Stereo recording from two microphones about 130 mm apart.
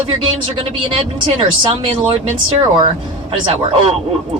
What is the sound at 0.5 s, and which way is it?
Speech, 45° right (ahead or behind).